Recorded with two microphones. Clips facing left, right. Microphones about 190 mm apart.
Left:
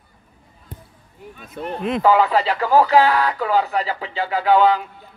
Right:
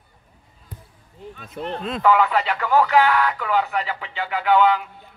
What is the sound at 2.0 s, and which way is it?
Speech, 35° left (ahead or behind).